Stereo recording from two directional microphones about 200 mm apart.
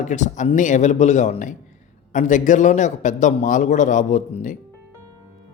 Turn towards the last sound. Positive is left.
turn(degrees=40)  # may be behind; listen again after turning